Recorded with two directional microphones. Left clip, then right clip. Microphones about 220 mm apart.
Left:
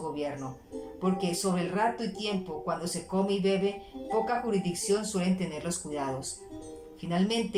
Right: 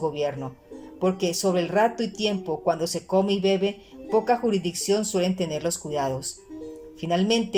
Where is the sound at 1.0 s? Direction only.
45° right (ahead or behind).